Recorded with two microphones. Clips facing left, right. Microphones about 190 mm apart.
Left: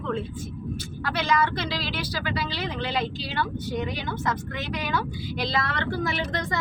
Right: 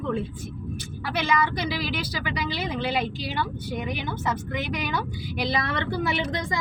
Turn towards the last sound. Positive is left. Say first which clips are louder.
# right 1 dB
turn(degrees=-15)  # may be behind; listen again after turning